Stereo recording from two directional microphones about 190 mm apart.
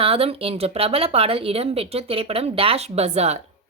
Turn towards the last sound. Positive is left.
turn(degrees=-35)  # may be behind; listen again after turning